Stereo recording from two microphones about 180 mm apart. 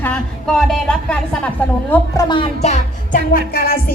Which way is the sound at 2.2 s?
30° left (ahead or behind).